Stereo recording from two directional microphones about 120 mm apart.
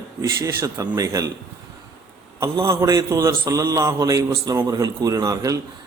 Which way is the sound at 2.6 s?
25° right (ahead or behind).